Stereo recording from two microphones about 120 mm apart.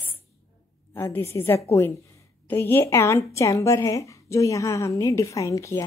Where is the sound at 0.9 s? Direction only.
20° left (ahead or behind).